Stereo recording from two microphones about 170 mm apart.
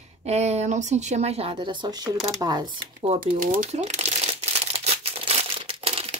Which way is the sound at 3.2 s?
50° right (ahead or behind).